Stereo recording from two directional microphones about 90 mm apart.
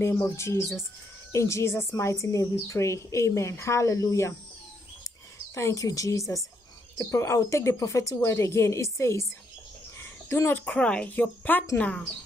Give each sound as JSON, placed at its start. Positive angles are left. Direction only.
{"t": 0.0, "sound": "speech", "side_deg": 30}
{"t": 5.5, "sound": "speech", "side_deg": 30}
{"t": 9.9, "sound": "a sound", "side_deg": 30}
{"t": 10.6, "sound": "speech", "side_deg": 15}